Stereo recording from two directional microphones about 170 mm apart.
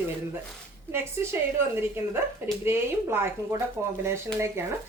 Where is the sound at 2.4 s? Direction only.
15° right (ahead or behind).